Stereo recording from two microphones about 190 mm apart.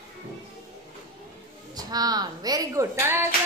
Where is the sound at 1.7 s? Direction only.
20° right (ahead or behind).